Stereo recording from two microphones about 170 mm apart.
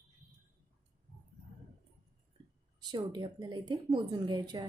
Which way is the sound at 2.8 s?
25° right (ahead or behind).